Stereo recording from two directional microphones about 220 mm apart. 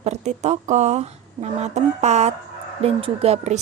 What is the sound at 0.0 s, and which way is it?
A woman's voice, 30° right (ahead or behind).